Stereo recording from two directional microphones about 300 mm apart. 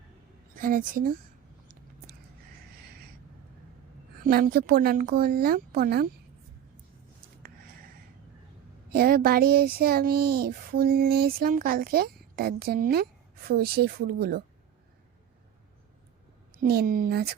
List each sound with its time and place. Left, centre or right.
0.6 s speech: right
4.3 s speech: right
8.9 s speech: right
16.6 s speech: right